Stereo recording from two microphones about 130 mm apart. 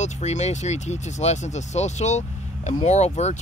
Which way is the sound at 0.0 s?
60° left (ahead or behind).